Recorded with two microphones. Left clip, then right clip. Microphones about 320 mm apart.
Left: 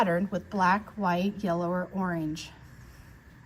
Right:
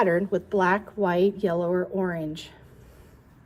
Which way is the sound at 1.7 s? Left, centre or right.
Left.